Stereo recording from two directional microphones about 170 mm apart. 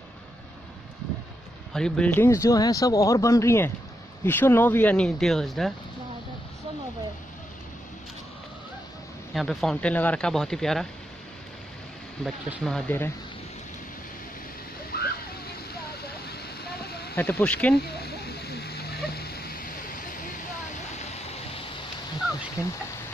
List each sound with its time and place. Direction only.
1.7 s speech: 5° left (ahead or behind)
9.3 s speech: centre (ahead or behind)
12.2 s speech: centre (ahead or behind)
14.9 s a sound: 65° left (ahead or behind)
17.1 s speech: 10° left (ahead or behind)
17.7 s a sound: 65° left (ahead or behind); by 20.4 s 50° left (ahead or behind)
20.9 s waterfall: 40° left (ahead or behind)
22.6 s speech: 15° left (ahead or behind)